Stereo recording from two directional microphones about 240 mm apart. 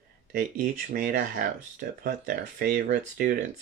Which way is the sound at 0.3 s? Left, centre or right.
Right.